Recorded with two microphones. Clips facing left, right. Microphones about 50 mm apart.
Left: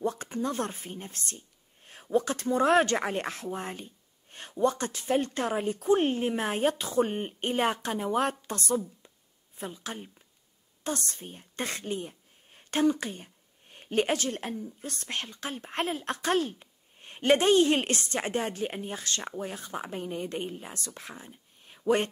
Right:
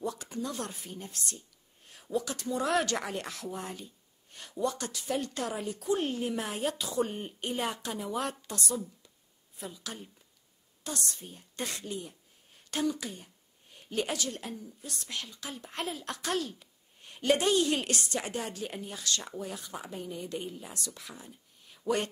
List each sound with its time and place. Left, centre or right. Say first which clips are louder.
0.0 s a woman's voice: left 5 dB; left